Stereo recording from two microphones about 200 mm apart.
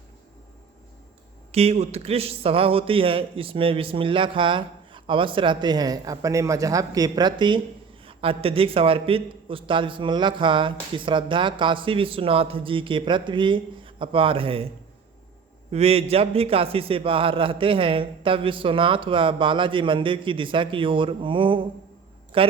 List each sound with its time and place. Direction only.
1.5 s a man's voice: 30° right (ahead or behind)
15.7 s a man's voice: 30° right (ahead or behind)